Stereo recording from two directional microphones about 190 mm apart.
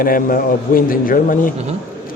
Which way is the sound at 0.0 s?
50° left (ahead or behind).